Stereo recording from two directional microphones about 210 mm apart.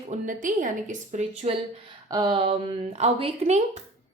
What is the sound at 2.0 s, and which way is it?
A woman's voice, 20° right (ahead or behind).